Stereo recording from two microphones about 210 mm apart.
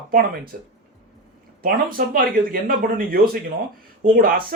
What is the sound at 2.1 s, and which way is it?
Speech, 40° right (ahead or behind).